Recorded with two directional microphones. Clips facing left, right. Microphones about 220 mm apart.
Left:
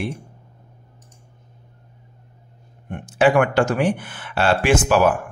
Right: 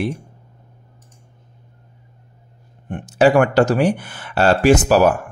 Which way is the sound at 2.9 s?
40° right (ahead or behind).